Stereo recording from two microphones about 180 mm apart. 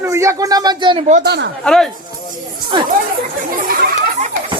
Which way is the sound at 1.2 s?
65° right (ahead or behind).